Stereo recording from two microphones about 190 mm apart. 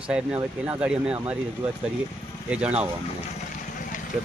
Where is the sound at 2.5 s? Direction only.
5° right (ahead or behind).